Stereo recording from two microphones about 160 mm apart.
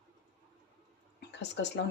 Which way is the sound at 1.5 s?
90° left.